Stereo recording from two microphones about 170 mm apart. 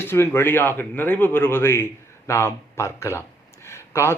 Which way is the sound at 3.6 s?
15° left (ahead or behind).